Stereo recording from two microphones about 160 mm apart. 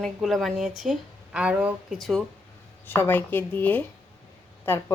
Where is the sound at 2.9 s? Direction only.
15° left (ahead or behind).